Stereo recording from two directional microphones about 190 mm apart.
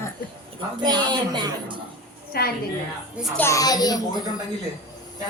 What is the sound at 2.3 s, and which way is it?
Speech, 55° left (ahead or behind).